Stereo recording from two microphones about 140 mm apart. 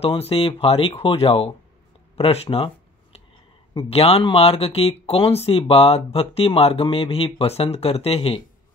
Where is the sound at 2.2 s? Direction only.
45° left (ahead or behind).